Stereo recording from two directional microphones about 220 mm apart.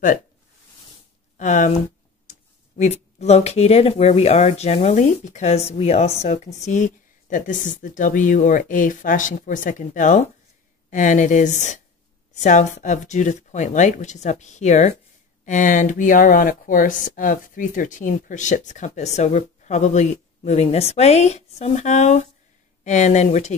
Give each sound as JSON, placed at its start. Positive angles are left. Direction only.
{"t": 1.4, "sound": "speech", "side_deg": 35}
{"t": 2.8, "sound": "speech", "side_deg": 30}